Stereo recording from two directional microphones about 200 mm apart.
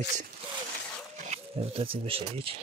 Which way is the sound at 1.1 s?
35° right (ahead or behind).